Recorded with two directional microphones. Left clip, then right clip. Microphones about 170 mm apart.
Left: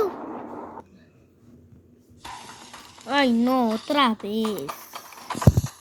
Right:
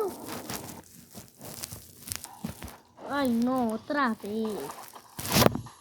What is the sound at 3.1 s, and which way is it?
Speech, 90° left.